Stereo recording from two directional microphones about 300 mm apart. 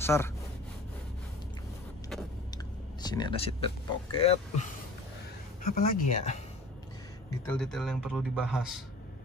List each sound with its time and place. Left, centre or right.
0.0 s speech: centre
2.5 s speech: centre
7.4 s a man's voice: centre